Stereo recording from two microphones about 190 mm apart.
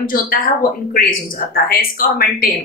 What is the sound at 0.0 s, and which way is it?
A woman's voice, 50° left (ahead or behind).